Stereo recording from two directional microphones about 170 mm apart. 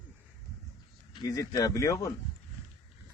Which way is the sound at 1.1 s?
20° left (ahead or behind).